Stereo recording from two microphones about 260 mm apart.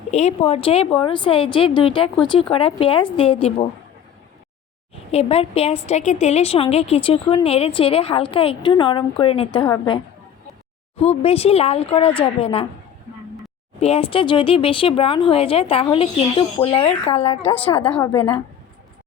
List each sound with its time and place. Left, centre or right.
0.1 s a woman's voice: left
5.1 s a woman's voice: left
13.7 s a woman's voice: left
17.4 s a woman's voice: centre